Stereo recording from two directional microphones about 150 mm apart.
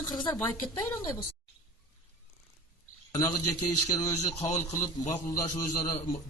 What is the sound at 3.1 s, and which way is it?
A man's voice, 20° left (ahead or behind).